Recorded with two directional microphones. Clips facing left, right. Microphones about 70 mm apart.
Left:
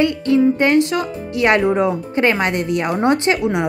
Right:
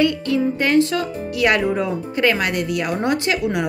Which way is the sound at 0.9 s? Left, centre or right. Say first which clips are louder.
Left 2 dB; left.